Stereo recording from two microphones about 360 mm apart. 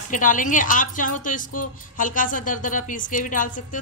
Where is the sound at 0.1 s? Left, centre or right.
Left.